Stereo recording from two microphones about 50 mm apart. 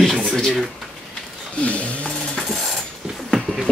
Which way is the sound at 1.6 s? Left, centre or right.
Left.